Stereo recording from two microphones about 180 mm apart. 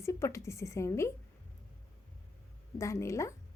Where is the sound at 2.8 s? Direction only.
15° left (ahead or behind).